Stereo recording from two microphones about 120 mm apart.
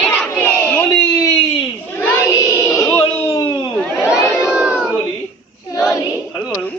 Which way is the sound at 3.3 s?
25° left (ahead or behind).